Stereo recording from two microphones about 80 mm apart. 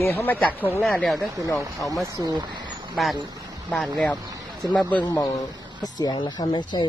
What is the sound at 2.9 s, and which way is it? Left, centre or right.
Speech, centre.